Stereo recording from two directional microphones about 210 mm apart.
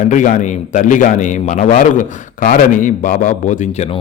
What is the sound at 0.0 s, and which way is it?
A man's voice, 35° left (ahead or behind).